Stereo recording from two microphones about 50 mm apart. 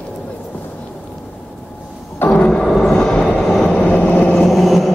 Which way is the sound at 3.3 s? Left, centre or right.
Centre.